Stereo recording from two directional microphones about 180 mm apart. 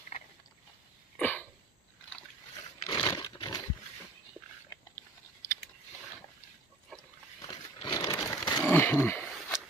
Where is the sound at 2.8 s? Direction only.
20° left (ahead or behind).